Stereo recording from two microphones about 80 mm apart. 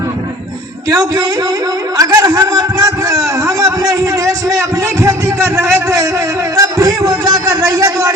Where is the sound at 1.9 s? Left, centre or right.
Right.